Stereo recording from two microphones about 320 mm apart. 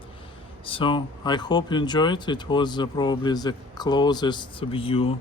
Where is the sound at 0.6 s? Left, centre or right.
Centre.